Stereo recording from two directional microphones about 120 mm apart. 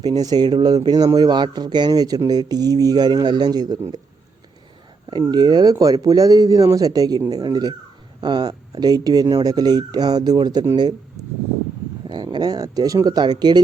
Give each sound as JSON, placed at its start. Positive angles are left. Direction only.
{"t": 0.0, "sound": "speech", "side_deg": -30}
{"t": 5.3, "sound": "speech", "side_deg": -35}
{"t": 11.2, "sound": "a sound", "side_deg": -30}
{"t": 12.0, "sound": "speech", "side_deg": -40}